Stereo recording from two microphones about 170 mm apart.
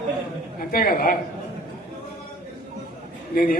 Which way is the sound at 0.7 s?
60° left (ahead or behind).